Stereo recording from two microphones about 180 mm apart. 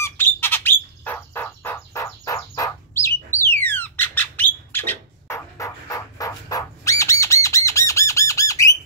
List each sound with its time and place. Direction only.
0.0 s bird: 10° left (ahead or behind)
7.4 s squawk: 15° left (ahead or behind)